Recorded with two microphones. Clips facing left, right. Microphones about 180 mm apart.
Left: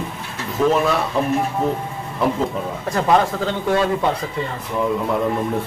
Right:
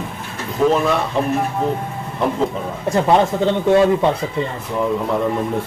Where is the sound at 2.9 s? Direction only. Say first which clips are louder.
Right 2 dB; 25° right (ahead or behind).